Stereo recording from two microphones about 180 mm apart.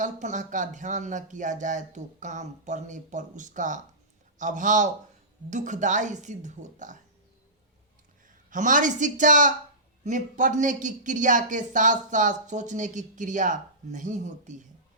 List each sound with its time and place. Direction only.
0.0 s a man's voice: 45° right (ahead or behind)
8.4 s a man's voice: 45° right (ahead or behind)